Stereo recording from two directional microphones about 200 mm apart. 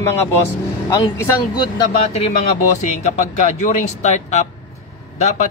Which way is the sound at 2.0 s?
30° left (ahead or behind).